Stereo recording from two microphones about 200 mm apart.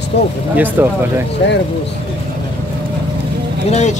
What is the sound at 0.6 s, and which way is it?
Speech, 10° right (ahead or behind).